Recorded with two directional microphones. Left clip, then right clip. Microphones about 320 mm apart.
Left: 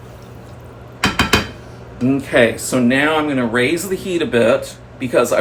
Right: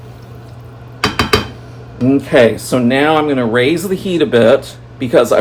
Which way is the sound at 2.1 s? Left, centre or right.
Right.